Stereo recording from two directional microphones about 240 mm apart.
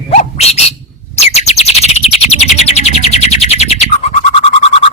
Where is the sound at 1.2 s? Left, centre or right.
Left.